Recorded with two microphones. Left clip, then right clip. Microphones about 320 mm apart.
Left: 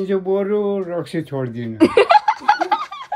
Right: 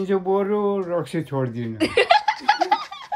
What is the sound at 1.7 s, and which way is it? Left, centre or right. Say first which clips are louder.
Laughter: left 5 dB; centre.